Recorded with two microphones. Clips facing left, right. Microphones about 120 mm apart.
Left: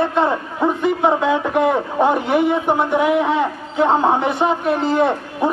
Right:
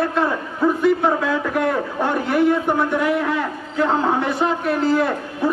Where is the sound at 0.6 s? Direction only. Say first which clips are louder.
Even; 25° left (ahead or behind).